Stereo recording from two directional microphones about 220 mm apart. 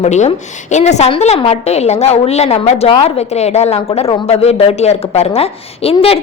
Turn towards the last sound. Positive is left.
turn(degrees=25)  # may be behind; listen again after turning